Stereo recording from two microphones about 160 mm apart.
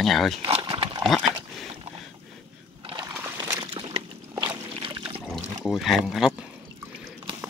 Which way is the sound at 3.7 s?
35° right (ahead or behind).